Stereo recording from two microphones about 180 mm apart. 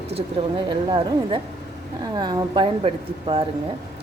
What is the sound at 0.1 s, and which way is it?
Speech, 30° right (ahead or behind).